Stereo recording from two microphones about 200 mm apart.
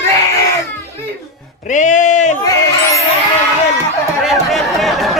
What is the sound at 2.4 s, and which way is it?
Speech, 15° left (ahead or behind).